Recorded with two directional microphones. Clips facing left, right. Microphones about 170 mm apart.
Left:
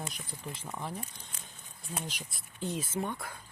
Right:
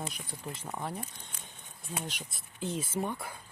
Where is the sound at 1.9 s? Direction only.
Centre (ahead or behind).